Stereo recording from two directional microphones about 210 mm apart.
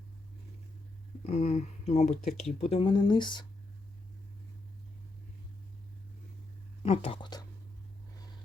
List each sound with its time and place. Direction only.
1.3 s speech: 30° left (ahead or behind)
6.8 s speech: 25° left (ahead or behind)